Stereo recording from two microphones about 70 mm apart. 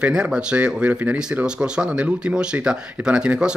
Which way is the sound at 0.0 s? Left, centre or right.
Centre.